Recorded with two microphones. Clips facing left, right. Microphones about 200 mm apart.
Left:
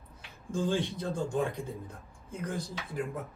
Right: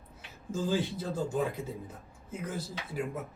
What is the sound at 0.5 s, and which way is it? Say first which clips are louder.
A man's voice: even; 5° right (ahead or behind).